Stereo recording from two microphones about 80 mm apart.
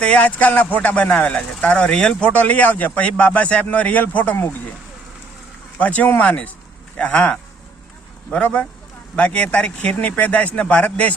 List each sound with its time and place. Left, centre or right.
0.0 s speech: centre
5.8 s speech: centre